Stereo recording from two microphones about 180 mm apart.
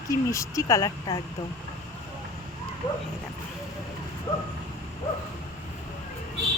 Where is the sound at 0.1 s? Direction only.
15° left (ahead or behind).